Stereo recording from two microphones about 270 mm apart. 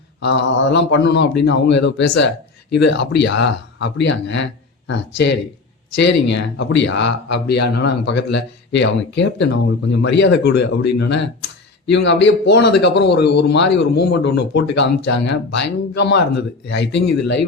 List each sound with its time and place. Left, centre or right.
0.2 s a man's voice: left